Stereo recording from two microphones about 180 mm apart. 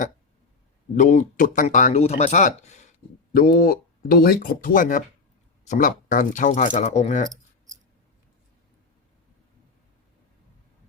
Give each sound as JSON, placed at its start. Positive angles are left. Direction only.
{"t": 0.9, "sound": "speech", "side_deg": 45}
{"t": 3.3, "sound": "speech", "side_deg": 50}